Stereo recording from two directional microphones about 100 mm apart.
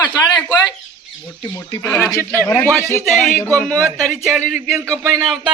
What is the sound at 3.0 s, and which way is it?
Speech, centre (ahead or behind).